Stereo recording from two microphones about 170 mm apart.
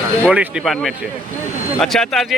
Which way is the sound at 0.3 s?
5° right (ahead or behind).